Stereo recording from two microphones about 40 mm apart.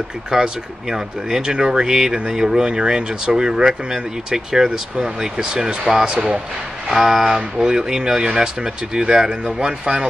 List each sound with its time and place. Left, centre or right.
0.3 s speech: centre
7.3 s speech: centre